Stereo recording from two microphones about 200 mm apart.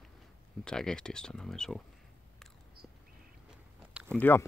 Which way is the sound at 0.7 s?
5° left (ahead or behind).